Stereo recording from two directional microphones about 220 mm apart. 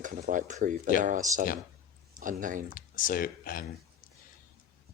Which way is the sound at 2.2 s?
35° right (ahead or behind).